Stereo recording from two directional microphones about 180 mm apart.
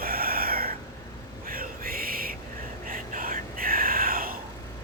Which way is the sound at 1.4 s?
50° right (ahead or behind).